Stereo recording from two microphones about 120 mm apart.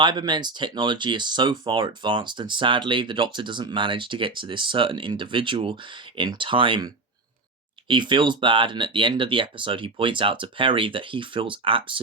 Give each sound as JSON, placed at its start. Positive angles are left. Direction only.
{"t": 0.0, "sound": "speech", "side_deg": -40}